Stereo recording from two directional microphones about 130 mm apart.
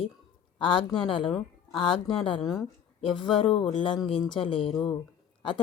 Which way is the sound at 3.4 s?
40° left (ahead or behind).